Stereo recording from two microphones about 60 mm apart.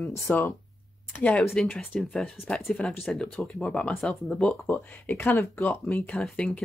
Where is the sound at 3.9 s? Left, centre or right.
Centre.